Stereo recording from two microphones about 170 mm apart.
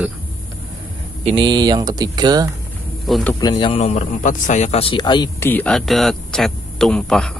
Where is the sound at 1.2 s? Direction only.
30° right (ahead or behind).